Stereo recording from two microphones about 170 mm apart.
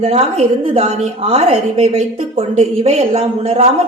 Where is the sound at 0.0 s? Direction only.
35° right (ahead or behind).